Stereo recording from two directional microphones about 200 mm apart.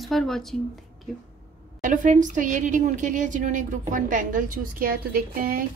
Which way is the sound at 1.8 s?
40° right (ahead or behind).